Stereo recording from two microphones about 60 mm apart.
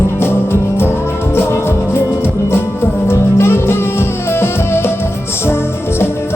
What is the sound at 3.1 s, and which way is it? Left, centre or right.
Music, left.